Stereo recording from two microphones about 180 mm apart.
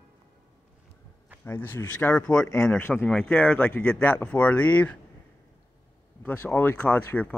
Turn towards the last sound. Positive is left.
turn(degrees=10)  # may be behind; listen again after turning